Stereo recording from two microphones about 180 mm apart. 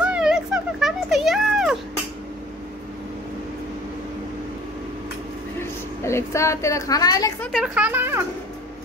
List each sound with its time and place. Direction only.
0.0 s a sound: 5° right (ahead or behind)
5.6 s a woman's voice: 15° left (ahead or behind)
7.5 s speech: 5° right (ahead or behind)